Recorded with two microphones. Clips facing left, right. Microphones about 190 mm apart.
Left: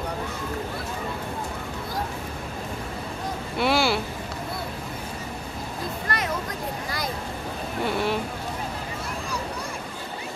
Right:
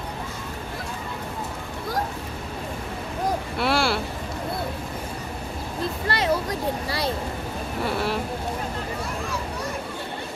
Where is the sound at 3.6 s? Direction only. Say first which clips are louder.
Left 1 dB; centre (ahead or behind).